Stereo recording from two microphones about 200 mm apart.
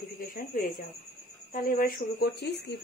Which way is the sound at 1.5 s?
45° left (ahead or behind).